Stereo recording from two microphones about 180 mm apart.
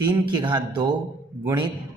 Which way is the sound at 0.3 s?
25° right (ahead or behind).